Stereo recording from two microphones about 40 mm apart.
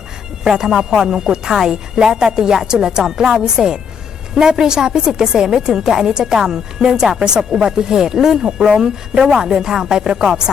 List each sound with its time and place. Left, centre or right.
0.4 s a woman's voice: centre